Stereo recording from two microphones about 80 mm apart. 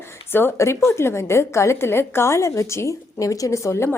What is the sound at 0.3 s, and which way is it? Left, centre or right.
A woman's voice, left.